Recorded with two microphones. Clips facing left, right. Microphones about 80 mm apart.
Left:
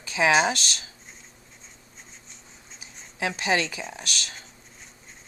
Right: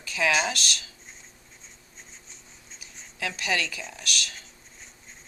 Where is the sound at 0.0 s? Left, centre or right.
Left.